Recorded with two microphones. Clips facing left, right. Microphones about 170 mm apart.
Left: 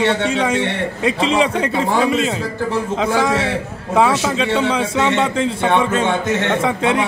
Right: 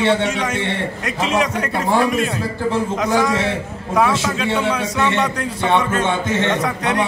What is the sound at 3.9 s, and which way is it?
A man's voice, 25° left (ahead or behind).